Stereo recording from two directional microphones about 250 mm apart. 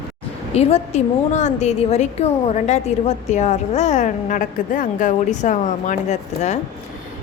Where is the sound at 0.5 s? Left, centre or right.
Left.